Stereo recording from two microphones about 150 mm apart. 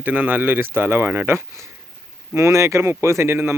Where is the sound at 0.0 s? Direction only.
10° right (ahead or behind).